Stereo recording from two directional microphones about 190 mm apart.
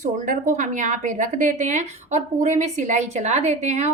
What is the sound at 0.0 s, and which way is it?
A woman's voice, 40° right (ahead or behind).